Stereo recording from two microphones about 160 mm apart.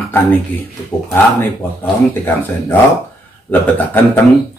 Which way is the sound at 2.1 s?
15° left (ahead or behind).